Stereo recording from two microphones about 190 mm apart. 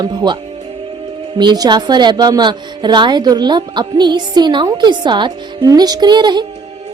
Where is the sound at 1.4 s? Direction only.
25° right (ahead or behind).